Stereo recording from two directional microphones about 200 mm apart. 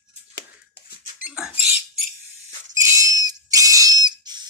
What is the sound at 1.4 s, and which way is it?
Rodents, 5° right (ahead or behind).